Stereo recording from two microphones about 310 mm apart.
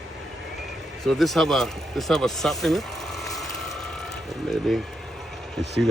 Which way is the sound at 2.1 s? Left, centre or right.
Centre.